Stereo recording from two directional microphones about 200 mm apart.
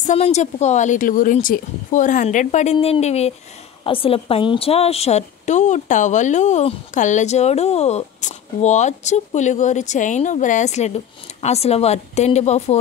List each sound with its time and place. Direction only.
0.0 s a woman's voice: 35° left (ahead or behind)